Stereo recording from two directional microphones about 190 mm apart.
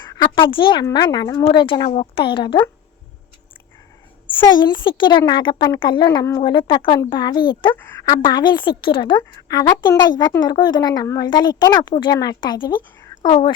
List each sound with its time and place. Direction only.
0.2 s a woman's voice: 25° left (ahead or behind)
4.4 s a woman's voice: 25° left (ahead or behind)